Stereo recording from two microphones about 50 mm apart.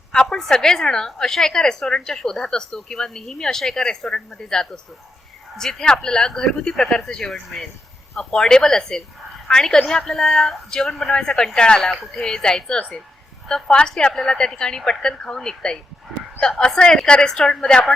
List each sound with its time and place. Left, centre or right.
0.1 s a woman's voice: centre